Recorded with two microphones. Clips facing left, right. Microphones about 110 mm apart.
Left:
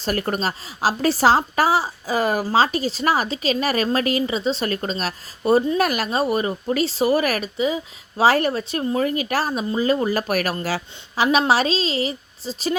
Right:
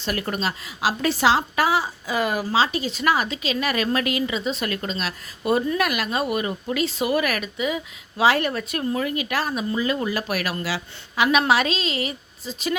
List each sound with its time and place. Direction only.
0.0 s a woman's voice: 40° left (ahead or behind)
9.0 s a woman's voice: 40° left (ahead or behind)